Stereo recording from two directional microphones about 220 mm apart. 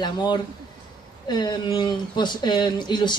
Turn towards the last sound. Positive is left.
turn(degrees=20)  # may be behind; listen again after turning